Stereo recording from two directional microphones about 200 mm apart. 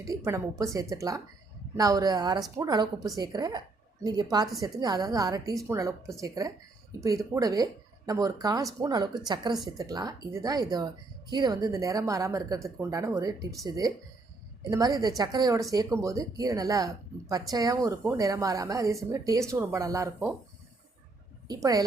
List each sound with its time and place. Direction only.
0.0 s speech: 15° right (ahead or behind)
21.4 s speech: 20° right (ahead or behind)